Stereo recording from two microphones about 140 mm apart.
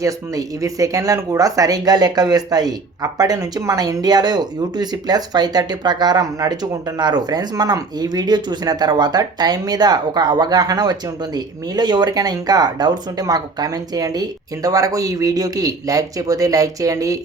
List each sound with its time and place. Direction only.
0.0 s speech: 25° right (ahead or behind)